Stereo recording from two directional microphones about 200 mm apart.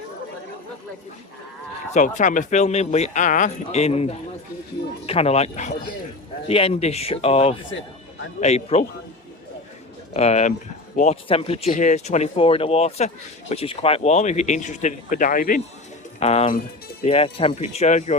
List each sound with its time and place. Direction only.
1.9 s speech: 40° left (ahead or behind)
10.2 s speech: 35° left (ahead or behind)
16.2 s speech: 30° left (ahead or behind)